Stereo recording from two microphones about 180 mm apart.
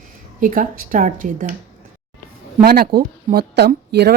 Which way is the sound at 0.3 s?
50° right (ahead or behind).